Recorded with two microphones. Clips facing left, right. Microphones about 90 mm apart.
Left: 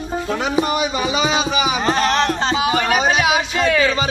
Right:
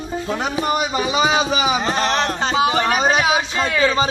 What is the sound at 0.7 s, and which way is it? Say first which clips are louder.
Speech: even; 30° right (ahead or behind).